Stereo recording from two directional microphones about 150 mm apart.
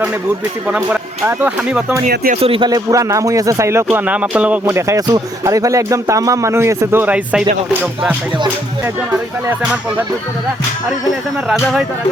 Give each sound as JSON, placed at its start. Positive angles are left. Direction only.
{"t": 0.7, "sound": "speech", "side_deg": -10}
{"t": 2.3, "sound": "speech", "side_deg": -40}
{"t": 2.6, "sound": "a man's voice", "side_deg": -25}
{"t": 4.9, "sound": "a man's voice", "side_deg": -25}
{"t": 11.4, "sound": "speech", "side_deg": 0}